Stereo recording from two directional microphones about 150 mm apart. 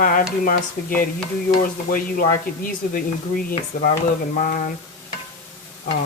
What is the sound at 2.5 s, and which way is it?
Speech, 80° left.